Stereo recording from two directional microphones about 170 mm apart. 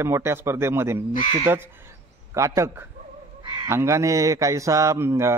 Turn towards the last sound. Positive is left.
turn(degrees=-15)  # may be behind; listen again after turning